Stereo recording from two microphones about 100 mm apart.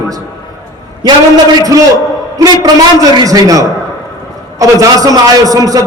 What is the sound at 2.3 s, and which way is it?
A man's voice, 35° right (ahead or behind).